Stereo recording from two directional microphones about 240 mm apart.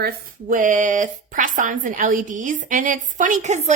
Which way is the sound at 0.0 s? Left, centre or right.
Right.